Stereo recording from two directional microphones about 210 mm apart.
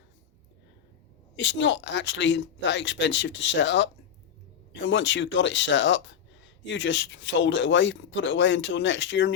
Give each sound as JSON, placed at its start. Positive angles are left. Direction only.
{"t": 1.4, "sound": "speech", "side_deg": 60}